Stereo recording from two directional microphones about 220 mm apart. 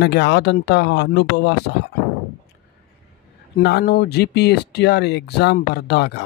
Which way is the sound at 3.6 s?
50° left (ahead or behind).